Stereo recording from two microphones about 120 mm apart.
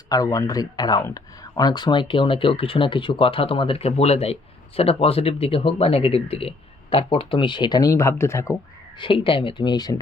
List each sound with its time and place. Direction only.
0.1 s speech: 30° left (ahead or behind)
9.0 s speech: 45° left (ahead or behind)